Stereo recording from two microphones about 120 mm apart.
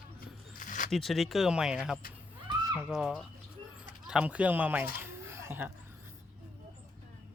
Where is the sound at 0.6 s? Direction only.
90° left.